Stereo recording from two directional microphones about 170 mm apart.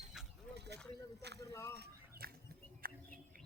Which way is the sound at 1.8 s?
65° right (ahead or behind).